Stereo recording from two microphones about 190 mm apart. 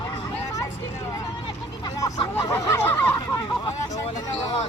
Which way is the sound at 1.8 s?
20° left (ahead or behind).